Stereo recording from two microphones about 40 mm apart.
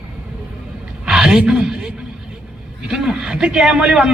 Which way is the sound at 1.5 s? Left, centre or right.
Centre.